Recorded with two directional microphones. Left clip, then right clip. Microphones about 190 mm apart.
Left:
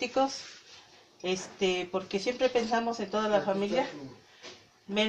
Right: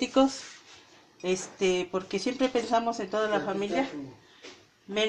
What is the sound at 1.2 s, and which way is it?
Speech, 35° right (ahead or behind).